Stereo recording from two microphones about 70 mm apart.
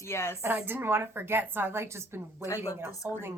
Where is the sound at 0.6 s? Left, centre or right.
Right.